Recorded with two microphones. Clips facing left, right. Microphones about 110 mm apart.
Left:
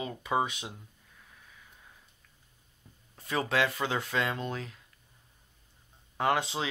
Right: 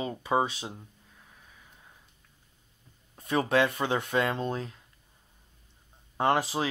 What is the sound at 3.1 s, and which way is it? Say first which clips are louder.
Speech: right 4 dB; 25° right (ahead or behind).